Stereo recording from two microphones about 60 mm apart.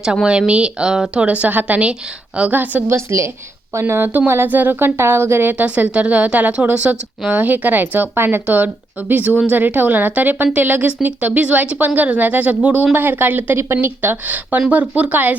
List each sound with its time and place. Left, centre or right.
0.3 s a woman's voice: centre
2.5 s a woman's voice: right
2.8 s a woman's voice: right
5.6 s a woman's voice: right
14.3 s a woman's voice: right